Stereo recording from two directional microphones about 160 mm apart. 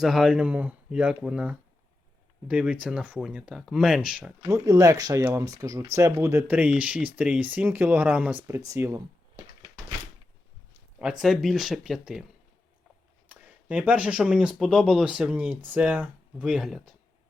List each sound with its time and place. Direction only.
0.0 s speech: centre (ahead or behind)
4.4 s speech: 20° right (ahead or behind)
11.0 s speech: 5° right (ahead or behind)
13.2 s speech: 10° right (ahead or behind)